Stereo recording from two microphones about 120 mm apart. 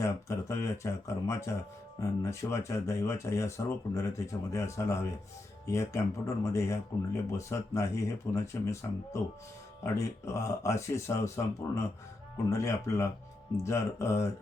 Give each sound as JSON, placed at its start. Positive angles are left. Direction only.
{"t": 0.0, "sound": "speech", "side_deg": 25}